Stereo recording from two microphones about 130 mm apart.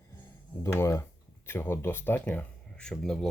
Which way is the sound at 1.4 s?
15° left (ahead or behind).